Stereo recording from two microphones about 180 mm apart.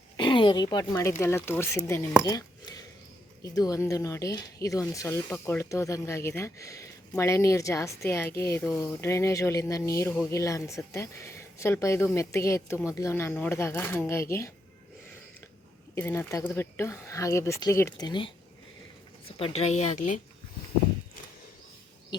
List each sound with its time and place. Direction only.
0.2 s speech: 25° left (ahead or behind)
2.2 s a sound: 20° left (ahead or behind)
3.4 s speech: 20° left (ahead or behind)
16.0 s speech: 15° left (ahead or behind)
19.4 s speech: 35° left (ahead or behind)